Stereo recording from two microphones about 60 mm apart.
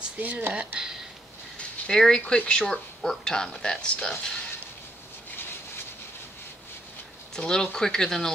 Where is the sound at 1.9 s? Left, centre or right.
Centre.